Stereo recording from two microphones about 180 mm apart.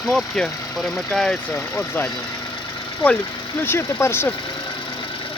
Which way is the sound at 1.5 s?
15° left (ahead or behind).